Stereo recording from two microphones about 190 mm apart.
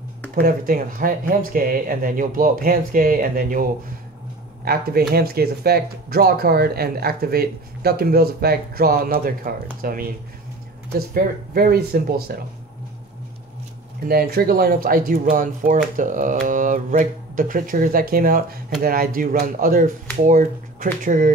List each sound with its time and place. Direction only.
0.3 s speech: 50° right (ahead or behind)
4.7 s speech: 55° right (ahead or behind)
14.0 s speech: 55° right (ahead or behind)